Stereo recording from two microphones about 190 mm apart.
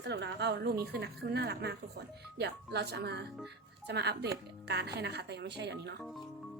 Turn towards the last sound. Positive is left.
turn(degrees=-60)  # may be behind; listen again after turning